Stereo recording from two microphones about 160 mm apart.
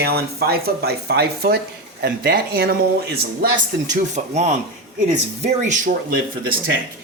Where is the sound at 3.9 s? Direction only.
45° right (ahead or behind).